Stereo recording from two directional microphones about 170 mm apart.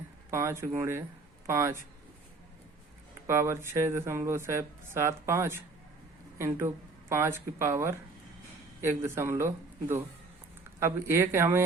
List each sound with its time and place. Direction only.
0.3 s speech: 15° right (ahead or behind)
3.2 s speech: 15° right (ahead or behind)
10.8 s speech: 15° right (ahead or behind)